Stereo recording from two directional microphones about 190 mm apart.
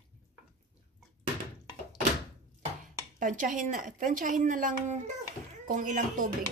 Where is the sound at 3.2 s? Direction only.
45° right (ahead or behind).